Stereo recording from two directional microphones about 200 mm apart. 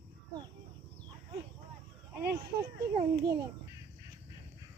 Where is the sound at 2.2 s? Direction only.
50° right (ahead or behind).